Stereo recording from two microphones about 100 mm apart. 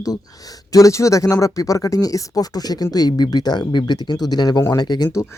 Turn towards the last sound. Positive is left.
turn(degrees=45)  # may be behind; listen again after turning